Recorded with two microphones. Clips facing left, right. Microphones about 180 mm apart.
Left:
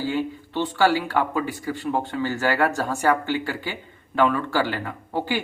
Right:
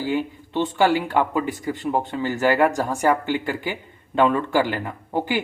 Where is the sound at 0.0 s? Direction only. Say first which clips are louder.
Right 1 dB; 20° right (ahead or behind).